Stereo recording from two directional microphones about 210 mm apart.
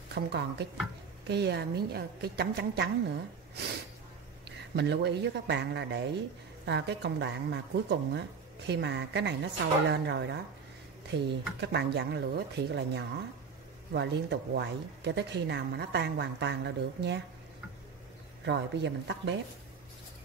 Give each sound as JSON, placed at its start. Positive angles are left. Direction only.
{"t": 0.1, "sound": "speech", "side_deg": -50}
{"t": 4.5, "sound": "speech", "side_deg": -55}
{"t": 18.4, "sound": "speech", "side_deg": -55}